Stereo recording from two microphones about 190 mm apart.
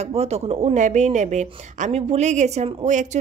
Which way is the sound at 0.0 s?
35° right (ahead or behind).